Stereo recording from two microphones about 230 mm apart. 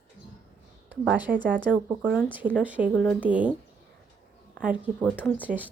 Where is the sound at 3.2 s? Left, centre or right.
Centre.